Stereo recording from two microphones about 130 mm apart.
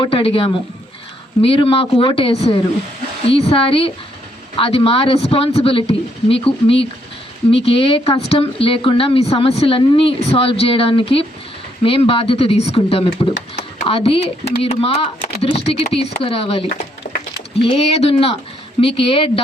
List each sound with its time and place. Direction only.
0.0 s a woman's voice: 45° left (ahead or behind)